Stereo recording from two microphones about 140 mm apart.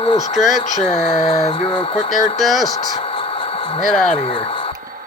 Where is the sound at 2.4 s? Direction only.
Centre (ahead or behind).